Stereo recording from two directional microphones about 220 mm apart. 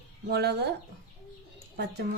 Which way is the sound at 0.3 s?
45° right (ahead or behind).